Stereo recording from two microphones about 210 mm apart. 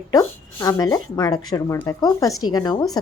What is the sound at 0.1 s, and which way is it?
A woman's voice, 15° left (ahead or behind).